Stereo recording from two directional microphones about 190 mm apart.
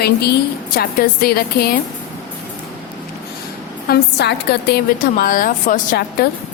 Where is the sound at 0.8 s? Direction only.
55° left (ahead or behind).